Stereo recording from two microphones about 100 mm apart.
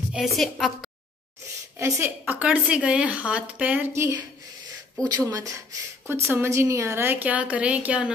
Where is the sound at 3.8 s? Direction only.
25° right (ahead or behind).